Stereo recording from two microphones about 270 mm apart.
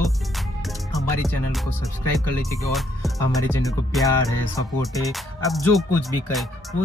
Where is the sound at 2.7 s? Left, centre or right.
Centre.